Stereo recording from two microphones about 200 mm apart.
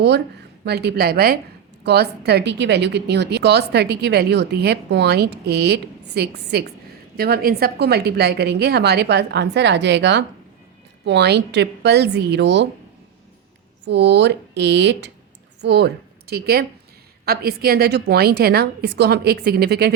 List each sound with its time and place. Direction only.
0.6 s a woman's voice: 55° right (ahead or behind)
13.8 s a woman's voice: 60° right (ahead or behind)